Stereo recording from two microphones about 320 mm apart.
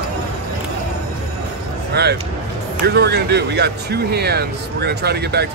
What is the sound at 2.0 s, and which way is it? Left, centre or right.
Speech, right.